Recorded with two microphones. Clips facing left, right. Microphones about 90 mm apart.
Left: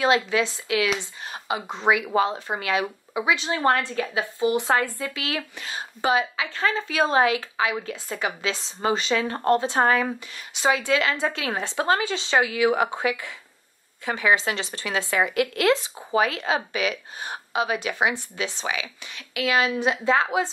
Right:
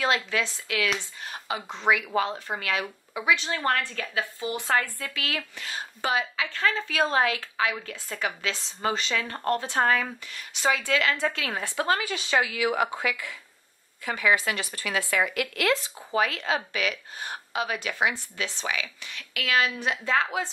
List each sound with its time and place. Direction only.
0.0 s speech: 20° left (ahead or behind)